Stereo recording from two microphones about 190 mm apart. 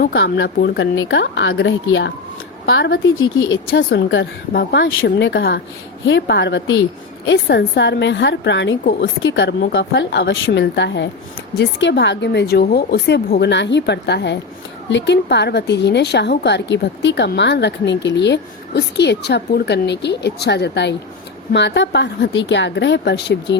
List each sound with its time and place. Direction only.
0.1 s a woman's voice: 80° left
2.6 s a woman's voice: 90° left
3.2 s speech: 20° left (ahead or behind)
3.8 s a woman's voice: 75° left (ahead or behind); by 9.8 s 60° left (ahead or behind)
9.9 s a woman's voice: 70° left (ahead or behind)